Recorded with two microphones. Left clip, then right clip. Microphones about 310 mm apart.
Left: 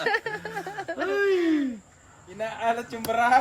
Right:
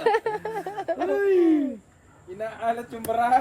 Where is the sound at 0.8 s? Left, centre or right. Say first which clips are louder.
Right 5 dB; centre.